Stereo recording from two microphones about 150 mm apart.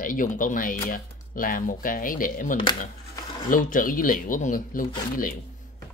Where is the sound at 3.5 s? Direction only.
65° left (ahead or behind).